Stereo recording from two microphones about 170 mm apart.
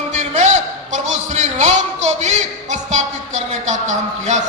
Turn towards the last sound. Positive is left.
turn(degrees=-45)  # may be behind; listen again after turning